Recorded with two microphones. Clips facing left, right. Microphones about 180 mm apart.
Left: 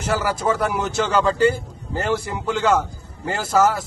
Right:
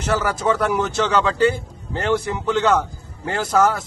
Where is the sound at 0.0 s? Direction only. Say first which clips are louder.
Right 1 dB; 10° left (ahead or behind).